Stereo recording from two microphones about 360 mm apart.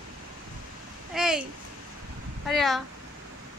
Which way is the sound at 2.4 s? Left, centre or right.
Centre.